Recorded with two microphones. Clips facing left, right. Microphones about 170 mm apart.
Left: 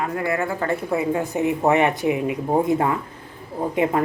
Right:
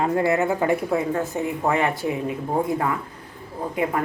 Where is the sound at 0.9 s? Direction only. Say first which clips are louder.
Left 1 dB; 15° left (ahead or behind).